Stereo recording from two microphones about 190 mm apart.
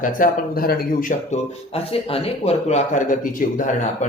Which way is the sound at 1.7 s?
30° left (ahead or behind).